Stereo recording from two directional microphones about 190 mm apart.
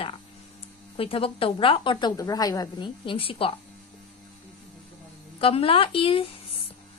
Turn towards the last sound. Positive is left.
turn(degrees=30)  # may be behind; listen again after turning